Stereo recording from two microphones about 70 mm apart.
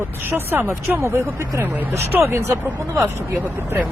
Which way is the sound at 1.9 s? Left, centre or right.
Right.